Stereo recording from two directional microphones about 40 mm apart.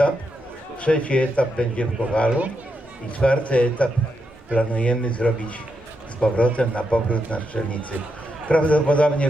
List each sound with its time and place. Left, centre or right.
0.8 s speech: left